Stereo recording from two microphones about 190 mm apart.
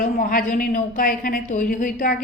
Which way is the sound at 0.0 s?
45° left (ahead or behind).